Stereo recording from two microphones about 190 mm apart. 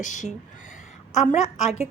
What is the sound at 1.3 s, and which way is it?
Speech, 40° left (ahead or behind).